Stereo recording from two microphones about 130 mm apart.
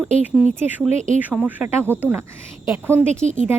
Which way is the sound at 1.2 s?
10° right (ahead or behind).